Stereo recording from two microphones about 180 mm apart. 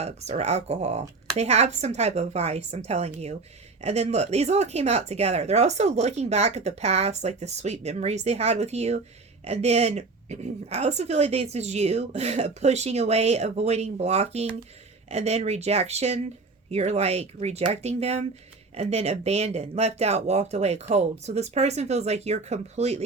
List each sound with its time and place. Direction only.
0.0 s speech: 35° right (ahead or behind)